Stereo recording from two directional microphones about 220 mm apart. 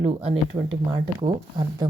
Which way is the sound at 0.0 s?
25° right (ahead or behind).